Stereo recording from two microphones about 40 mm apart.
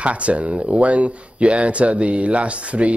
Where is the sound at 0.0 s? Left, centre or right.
Right.